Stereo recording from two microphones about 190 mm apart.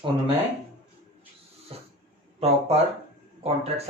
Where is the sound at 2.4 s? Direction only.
30° right (ahead or behind).